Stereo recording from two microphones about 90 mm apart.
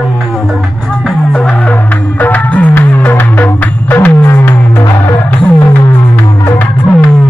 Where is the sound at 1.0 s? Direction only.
10° left (ahead or behind); by 5.1 s 30° left (ahead or behind).